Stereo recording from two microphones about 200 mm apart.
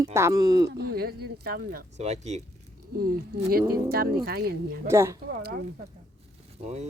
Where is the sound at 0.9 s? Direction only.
50° right (ahead or behind).